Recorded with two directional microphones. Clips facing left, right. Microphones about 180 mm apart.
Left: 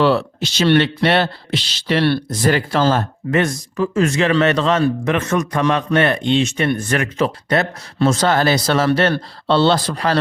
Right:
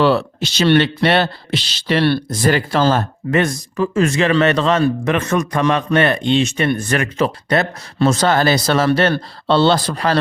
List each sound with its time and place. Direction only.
0.0 s speech: 40° right (ahead or behind)